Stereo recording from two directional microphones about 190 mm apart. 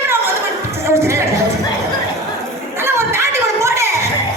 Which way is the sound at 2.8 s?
15° right (ahead or behind).